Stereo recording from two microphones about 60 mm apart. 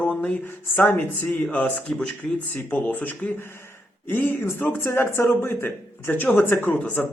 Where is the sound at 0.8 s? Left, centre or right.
Left.